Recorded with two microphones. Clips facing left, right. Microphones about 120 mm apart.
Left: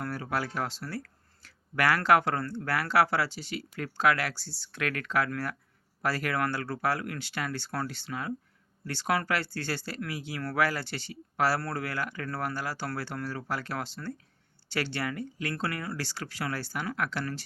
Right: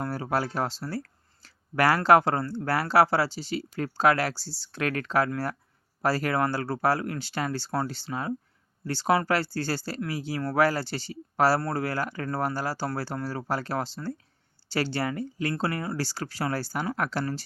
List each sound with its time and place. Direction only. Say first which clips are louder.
0.0 s speech: right 4 dB; 30° right (ahead or behind)